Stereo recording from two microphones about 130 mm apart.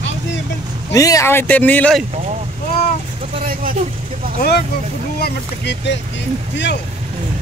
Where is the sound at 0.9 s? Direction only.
25° left (ahead or behind).